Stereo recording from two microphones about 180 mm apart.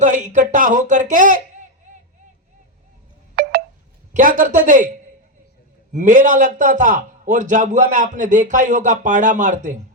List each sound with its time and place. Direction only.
0.0 s a man's voice: 45° right (ahead or behind)
1.9 s vehicle: 40° right (ahead or behind)
3.4 s telephone dialing: 60° right (ahead or behind)
4.1 s a man's voice: 50° right (ahead or behind)
5.9 s a man's voice: 45° right (ahead or behind)